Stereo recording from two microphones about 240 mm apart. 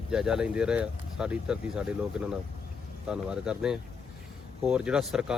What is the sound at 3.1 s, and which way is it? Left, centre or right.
Speech, centre.